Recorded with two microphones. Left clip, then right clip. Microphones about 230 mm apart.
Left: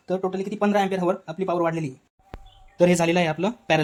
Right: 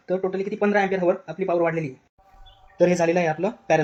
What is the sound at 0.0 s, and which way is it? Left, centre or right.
Speech, left.